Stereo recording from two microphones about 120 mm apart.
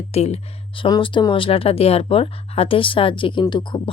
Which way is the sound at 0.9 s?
40° left (ahead or behind).